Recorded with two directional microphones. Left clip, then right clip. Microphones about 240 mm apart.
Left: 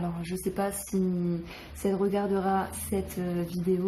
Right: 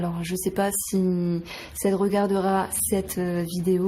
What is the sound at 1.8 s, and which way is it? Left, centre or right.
A woman's voice, right.